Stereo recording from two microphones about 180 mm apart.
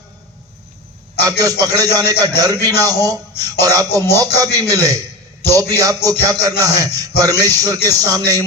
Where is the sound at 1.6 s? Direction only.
20° right (ahead or behind).